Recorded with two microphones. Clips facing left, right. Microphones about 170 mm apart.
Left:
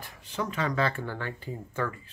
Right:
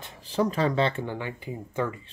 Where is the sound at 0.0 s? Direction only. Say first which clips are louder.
Right 7 dB; 30° right (ahead or behind).